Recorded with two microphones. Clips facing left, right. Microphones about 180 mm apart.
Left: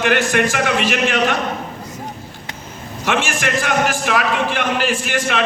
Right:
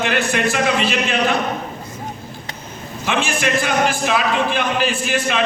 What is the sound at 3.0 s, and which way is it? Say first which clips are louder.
A man's voice: even; 85° left.